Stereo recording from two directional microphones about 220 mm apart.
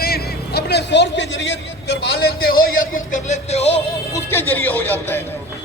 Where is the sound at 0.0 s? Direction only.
45° left (ahead or behind); by 3.8 s 30° left (ahead or behind).